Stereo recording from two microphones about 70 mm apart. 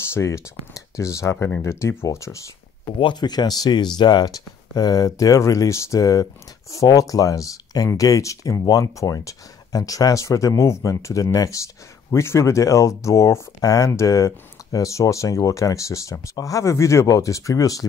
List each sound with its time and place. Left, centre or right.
0.1 s speech: left
3.2 s speech: left